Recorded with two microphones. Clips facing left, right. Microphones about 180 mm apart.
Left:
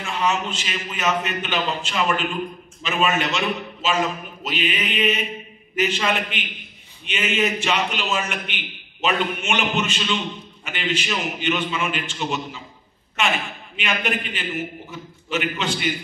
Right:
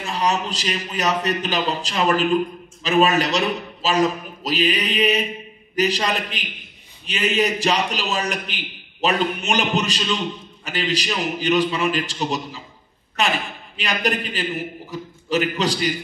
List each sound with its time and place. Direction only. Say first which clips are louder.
0.0 s a man's voice: right 1 dB; 35° right (ahead or behind)